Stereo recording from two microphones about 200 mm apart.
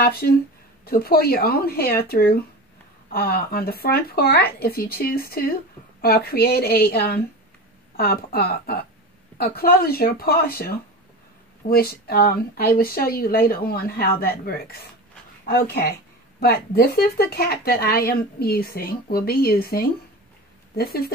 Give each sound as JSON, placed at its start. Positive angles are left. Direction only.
{"t": 0.0, "sound": "speech", "side_deg": 50}